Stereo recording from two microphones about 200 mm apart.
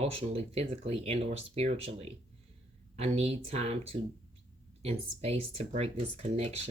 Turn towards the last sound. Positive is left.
turn(degrees=-35)  # may be behind; listen again after turning